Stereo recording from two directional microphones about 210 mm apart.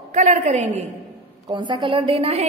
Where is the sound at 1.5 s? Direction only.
20° right (ahead or behind).